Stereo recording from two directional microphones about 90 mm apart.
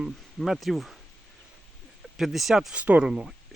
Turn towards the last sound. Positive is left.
turn(degrees=-10)  # may be behind; listen again after turning